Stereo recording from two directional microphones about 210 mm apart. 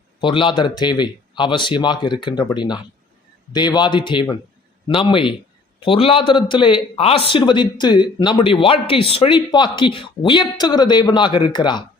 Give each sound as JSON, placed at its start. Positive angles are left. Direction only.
{"t": 0.2, "sound": "a man's voice", "side_deg": 25}